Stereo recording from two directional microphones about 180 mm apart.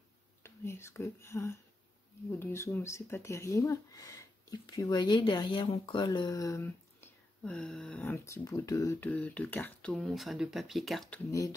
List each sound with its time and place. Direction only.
0.4 s speech: 15° left (ahead or behind)